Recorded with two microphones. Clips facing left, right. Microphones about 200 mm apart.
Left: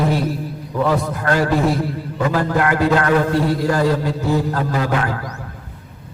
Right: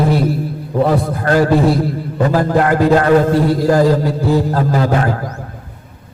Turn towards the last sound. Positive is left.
turn(degrees=-35)  # may be behind; listen again after turning